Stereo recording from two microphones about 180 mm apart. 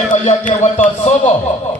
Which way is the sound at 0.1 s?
45° left (ahead or behind).